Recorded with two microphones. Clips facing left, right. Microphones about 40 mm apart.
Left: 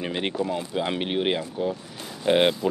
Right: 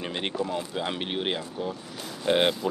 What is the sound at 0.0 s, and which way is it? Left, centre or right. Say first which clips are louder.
Speech: left 3 dB; centre.